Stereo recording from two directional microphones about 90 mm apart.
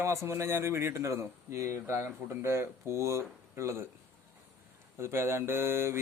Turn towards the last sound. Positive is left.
turn(degrees=-30)  # may be behind; listen again after turning